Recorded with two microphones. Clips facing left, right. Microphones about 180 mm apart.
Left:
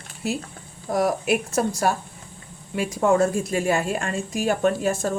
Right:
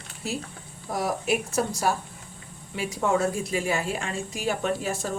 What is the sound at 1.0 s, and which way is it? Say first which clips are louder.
A woman's voice: left 5 dB; 60° left (ahead or behind).